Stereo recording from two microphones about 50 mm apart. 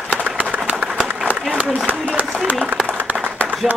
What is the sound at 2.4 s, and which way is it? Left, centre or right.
Speech, right.